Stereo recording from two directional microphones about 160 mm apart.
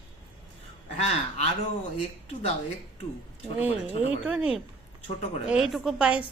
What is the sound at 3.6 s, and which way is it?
Speech, 40° left (ahead or behind).